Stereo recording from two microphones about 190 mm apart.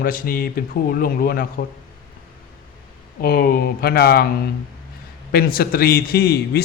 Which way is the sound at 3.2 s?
50° left (ahead or behind).